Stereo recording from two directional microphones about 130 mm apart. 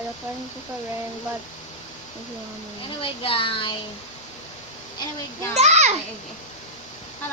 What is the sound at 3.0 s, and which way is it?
Speech, 45° left (ahead or behind).